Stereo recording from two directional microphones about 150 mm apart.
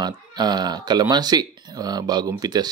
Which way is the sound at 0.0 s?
30° right (ahead or behind).